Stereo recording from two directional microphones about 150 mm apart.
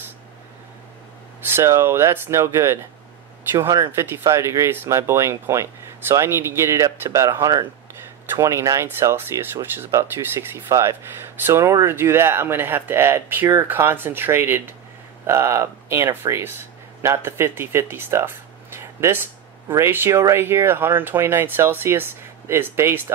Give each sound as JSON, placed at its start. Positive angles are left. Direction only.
{"t": 1.5, "sound": "speech", "side_deg": -20}